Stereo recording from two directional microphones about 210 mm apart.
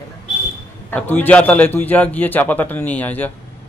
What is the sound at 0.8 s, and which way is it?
A man's voice, 10° left (ahead or behind).